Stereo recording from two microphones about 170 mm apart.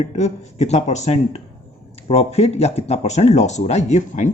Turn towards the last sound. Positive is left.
turn(degrees=45)  # may be behind; listen again after turning